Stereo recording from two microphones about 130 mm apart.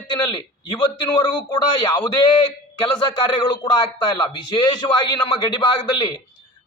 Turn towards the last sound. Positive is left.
turn(degrees=35)  # may be behind; listen again after turning